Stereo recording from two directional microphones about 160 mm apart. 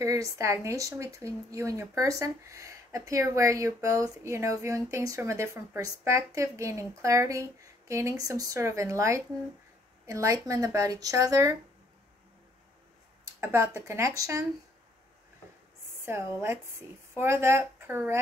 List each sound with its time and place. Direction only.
0.0 s speech: 20° right (ahead or behind)
13.4 s a woman's voice: 15° right (ahead or behind)
16.1 s a woman's voice: 15° right (ahead or behind)